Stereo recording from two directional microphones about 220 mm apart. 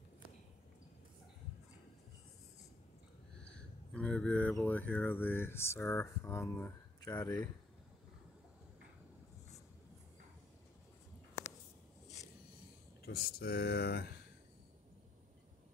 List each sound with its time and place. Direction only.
3.3 s speech: 5° left (ahead or behind)
13.0 s speech: 45° left (ahead or behind)